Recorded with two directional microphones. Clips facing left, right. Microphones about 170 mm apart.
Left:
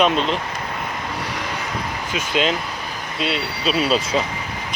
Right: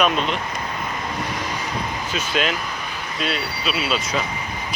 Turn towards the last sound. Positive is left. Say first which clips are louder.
# left 4 dB
turn(degrees=35)  # may be behind; listen again after turning